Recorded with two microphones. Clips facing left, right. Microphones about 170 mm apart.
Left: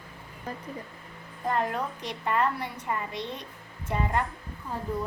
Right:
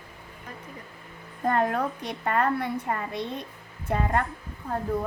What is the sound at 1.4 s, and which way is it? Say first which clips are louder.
A woman's voice: right 4 dB; 55° right (ahead or behind).